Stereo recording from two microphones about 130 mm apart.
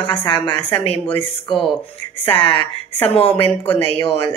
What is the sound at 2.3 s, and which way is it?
A man's voice, 45° left (ahead or behind).